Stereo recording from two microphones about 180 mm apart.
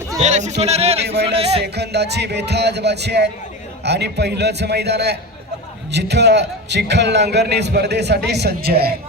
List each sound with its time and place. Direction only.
0.2 s a man's voice: 40° right (ahead or behind)
1.0 s a man's voice: 70° right (ahead or behind)
1.3 s speech: 30° right (ahead or behind)
1.6 s a man's voice: 65° right (ahead or behind)